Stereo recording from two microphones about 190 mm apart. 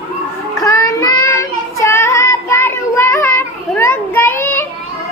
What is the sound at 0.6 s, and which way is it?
Child singing, 20° left (ahead or behind).